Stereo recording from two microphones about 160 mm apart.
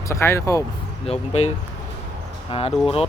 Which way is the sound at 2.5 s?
40° left (ahead or behind).